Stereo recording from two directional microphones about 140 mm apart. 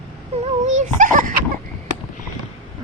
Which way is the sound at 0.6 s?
60° right (ahead or behind).